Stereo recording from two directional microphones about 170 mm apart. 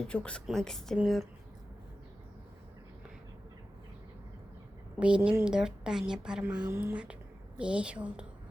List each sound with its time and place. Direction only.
0.1 s speech: 5° left (ahead or behind)
4.9 s speech: 5° right (ahead or behind)